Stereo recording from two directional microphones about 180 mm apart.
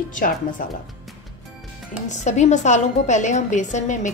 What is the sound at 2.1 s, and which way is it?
A woman's voice, 40° left (ahead or behind).